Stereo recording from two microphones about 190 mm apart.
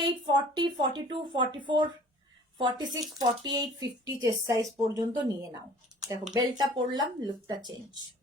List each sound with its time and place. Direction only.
0.0 s speech: 25° right (ahead or behind)